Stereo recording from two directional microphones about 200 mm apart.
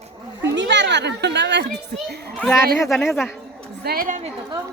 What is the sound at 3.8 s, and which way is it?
Speech, 45° right (ahead or behind).